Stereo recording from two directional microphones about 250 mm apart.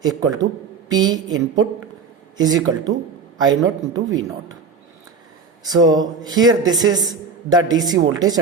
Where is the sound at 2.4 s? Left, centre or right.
Centre.